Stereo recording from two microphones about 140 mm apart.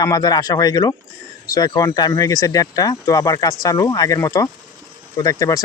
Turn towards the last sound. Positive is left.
turn(degrees=25)  # may be behind; listen again after turning